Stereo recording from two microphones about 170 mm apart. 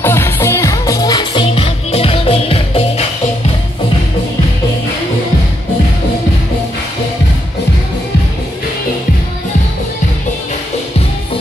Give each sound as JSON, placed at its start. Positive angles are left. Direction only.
{"t": 0.0, "sound": "music", "side_deg": 15}